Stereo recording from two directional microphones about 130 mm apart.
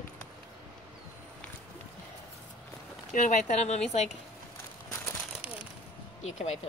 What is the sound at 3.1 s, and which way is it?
Speech, 70° left (ahead or behind).